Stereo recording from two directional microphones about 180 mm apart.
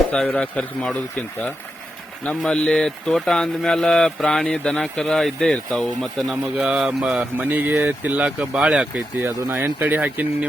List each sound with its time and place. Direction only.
0.1 s a man's voice: 5° left (ahead or behind)
2.2 s speech: 5° left (ahead or behind); by 10.2 s 10° right (ahead or behind)